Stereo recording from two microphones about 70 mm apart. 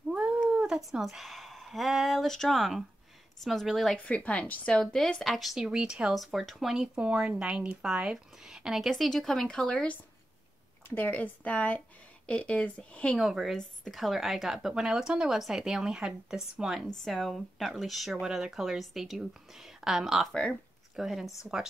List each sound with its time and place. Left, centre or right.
0.1 s cat: centre
0.5 s speech: centre
3.9 s speech: centre
6.1 s a woman's voice: centre
11.0 s a woman's voice: left
13.2 s a woman's voice: centre